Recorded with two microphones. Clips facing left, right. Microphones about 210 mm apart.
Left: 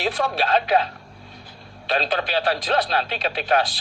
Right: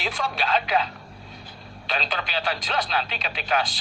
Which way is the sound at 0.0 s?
40° left (ahead or behind).